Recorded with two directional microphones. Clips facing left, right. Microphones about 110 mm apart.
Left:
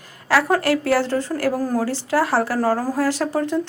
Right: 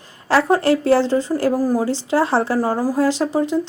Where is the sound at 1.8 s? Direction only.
20° right (ahead or behind).